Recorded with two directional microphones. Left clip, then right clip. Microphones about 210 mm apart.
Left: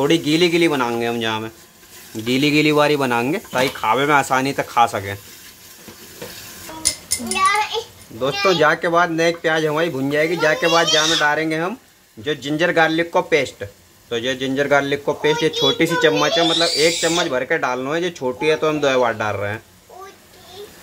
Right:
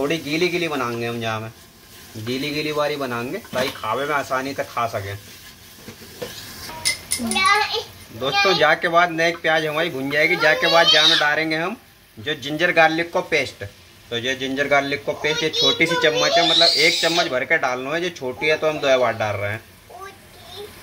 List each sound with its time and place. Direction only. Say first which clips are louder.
0.1 s speech: left 5 dB; 50° left (ahead or behind)
8.2 s speech: left 1 dB; 30° left (ahead or behind)